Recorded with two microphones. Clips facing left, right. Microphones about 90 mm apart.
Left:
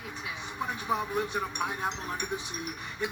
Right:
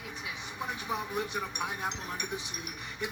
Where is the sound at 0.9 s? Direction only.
35° left (ahead or behind).